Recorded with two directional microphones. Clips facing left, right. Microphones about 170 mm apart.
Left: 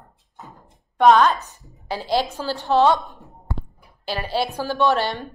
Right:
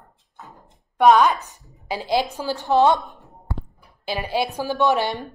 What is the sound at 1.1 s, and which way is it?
A woman's voice, 15° right (ahead or behind).